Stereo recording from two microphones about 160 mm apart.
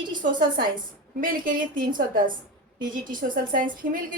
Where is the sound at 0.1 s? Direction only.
60° right (ahead or behind).